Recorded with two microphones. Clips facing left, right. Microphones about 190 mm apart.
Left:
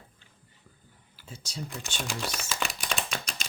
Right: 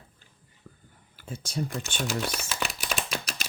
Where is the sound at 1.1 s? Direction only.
55° right (ahead or behind).